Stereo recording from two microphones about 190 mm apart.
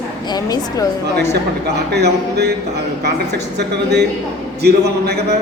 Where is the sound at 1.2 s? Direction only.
60° right (ahead or behind).